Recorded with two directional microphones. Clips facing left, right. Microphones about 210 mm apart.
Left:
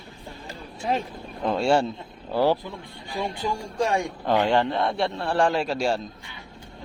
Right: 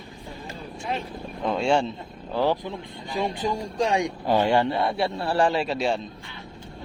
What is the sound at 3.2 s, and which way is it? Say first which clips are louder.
Speech: right 2 dB; 20° right (ahead or behind).